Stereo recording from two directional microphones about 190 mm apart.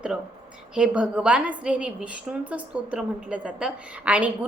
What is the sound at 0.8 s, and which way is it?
A woman's voice, 5° right (ahead or behind).